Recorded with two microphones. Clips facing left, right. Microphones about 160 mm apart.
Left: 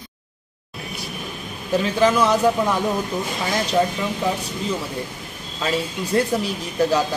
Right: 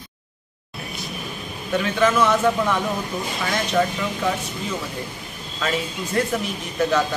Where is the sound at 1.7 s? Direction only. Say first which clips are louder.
Left 2 dB; 30° left (ahead or behind).